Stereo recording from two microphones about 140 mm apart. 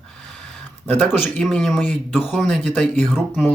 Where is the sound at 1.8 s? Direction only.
15° left (ahead or behind).